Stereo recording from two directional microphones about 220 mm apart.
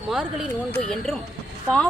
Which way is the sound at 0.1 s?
Centre (ahead or behind).